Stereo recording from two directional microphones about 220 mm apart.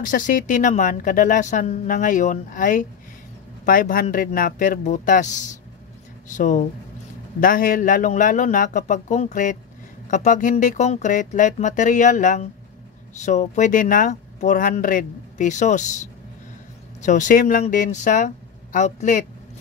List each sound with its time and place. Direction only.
0.0 s a woman's voice: 40° left (ahead or behind)